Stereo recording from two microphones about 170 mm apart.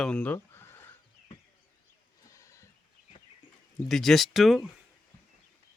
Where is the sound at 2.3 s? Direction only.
20° left (ahead or behind).